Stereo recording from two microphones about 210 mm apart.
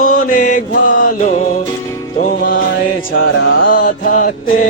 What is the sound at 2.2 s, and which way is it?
Music, 40° left (ahead or behind).